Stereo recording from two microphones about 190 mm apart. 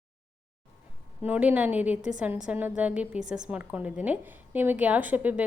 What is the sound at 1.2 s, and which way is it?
A woman's voice, 10° right (ahead or behind).